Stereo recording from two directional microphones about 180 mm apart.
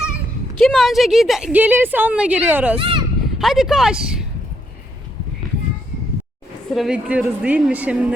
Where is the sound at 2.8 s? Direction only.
25° right (ahead or behind).